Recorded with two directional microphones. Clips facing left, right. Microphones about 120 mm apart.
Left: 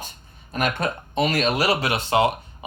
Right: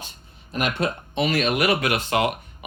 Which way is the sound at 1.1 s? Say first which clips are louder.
Left 1 dB; 40° left (ahead or behind).